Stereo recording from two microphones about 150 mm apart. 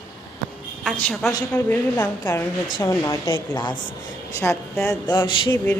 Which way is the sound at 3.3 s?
30° left (ahead or behind).